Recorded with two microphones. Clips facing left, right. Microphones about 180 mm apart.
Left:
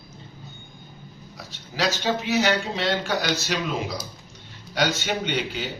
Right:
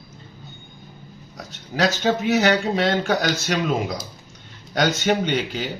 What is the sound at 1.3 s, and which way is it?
Speech, 45° right (ahead or behind).